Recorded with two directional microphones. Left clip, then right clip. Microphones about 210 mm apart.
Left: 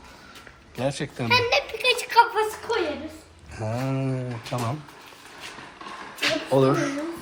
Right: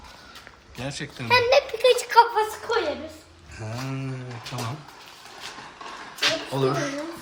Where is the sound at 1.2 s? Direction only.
20° right (ahead or behind).